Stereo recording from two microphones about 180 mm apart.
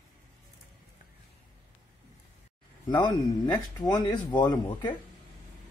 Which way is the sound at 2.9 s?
25° left (ahead or behind).